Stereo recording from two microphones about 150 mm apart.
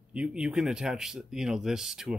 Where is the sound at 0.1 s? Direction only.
5° right (ahead or behind).